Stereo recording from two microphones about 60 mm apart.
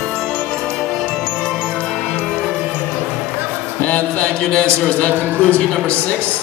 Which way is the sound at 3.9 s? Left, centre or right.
Left.